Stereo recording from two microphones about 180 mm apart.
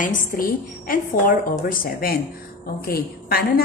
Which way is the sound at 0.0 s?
50° left (ahead or behind).